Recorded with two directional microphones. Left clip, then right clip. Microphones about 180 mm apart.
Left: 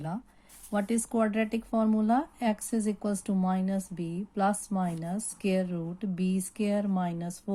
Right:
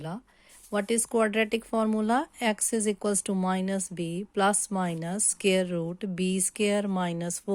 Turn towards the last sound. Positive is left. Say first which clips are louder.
# right 3 dB
turn(degrees=-45)  # may be behind; listen again after turning